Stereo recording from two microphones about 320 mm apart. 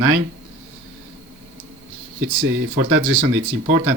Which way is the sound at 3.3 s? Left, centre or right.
Right.